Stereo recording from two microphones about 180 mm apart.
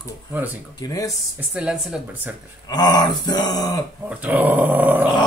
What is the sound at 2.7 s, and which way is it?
Speech, 20° left (ahead or behind).